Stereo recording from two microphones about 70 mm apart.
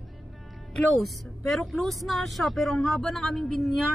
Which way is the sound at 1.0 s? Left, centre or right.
Centre.